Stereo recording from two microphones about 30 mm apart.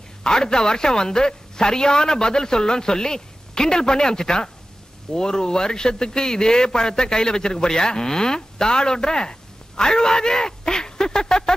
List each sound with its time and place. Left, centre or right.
0.2 s a man's voice: left